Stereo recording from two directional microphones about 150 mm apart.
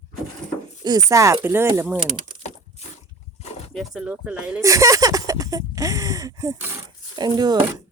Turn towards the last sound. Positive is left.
turn(degrees=-30)  # may be behind; listen again after turning